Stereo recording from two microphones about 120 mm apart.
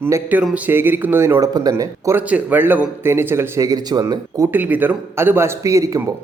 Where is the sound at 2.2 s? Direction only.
10° right (ahead or behind); by 4.5 s 30° right (ahead or behind).